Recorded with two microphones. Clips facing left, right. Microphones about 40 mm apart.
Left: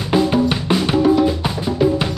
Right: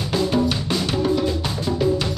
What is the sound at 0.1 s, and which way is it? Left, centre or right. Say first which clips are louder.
Drum: left 5 dB; left.